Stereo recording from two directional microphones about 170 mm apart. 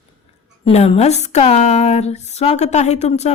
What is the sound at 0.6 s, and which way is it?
Speech, 35° left (ahead or behind).